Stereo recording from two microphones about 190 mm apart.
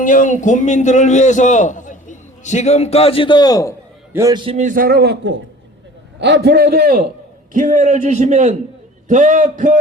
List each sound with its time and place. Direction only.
0.0 s a man's voice: 45° left (ahead or behind); by 3.8 s 20° left (ahead or behind)
4.1 s a man's voice: 15° right (ahead or behind)
4.5 s a man's voice: 40° right (ahead or behind)
7.5 s a man's voice: 40° right (ahead or behind)